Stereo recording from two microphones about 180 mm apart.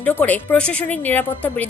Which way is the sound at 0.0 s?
10° left (ahead or behind).